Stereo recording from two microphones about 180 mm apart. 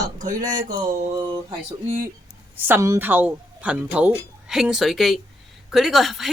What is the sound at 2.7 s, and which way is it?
Speech, 15° right (ahead or behind).